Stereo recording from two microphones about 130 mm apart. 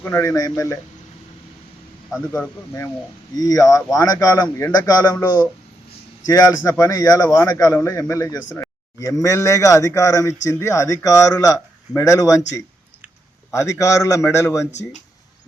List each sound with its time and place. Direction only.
0.0 s a man's voice: 20° left (ahead or behind)
3.3 s a man's voice: 30° left (ahead or behind)
6.2 s a man's voice: 25° left (ahead or behind)